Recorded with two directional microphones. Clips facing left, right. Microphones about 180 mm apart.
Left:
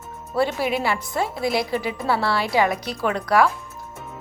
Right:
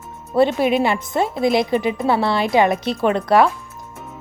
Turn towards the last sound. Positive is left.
turn(degrees=-25)  # may be behind; listen again after turning